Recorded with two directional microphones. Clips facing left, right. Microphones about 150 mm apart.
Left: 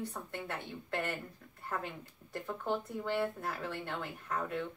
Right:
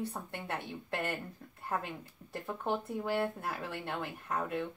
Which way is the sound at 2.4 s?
20° right (ahead or behind).